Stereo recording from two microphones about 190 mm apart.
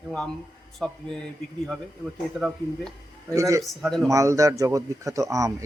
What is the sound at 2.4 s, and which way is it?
Speech, centre (ahead or behind).